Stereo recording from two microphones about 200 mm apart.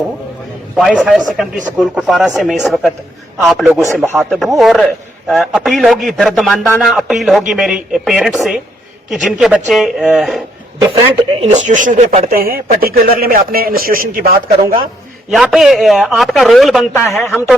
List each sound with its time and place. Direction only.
0.8 s speech: centre (ahead or behind)
10.8 s speech: 15° right (ahead or behind)
11.4 s speech: 35° right (ahead or behind)
12.3 s speech: 50° right (ahead or behind)
15.3 s speech: centre (ahead or behind)